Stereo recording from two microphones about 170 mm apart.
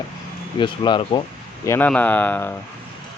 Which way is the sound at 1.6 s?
15° left (ahead or behind).